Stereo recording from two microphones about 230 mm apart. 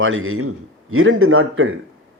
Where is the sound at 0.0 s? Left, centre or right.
Right.